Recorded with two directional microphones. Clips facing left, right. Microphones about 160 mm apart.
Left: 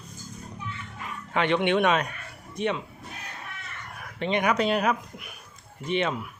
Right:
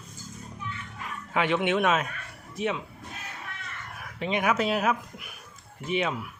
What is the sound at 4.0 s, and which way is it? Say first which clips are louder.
Speech: left 2 dB; 5° right (ahead or behind).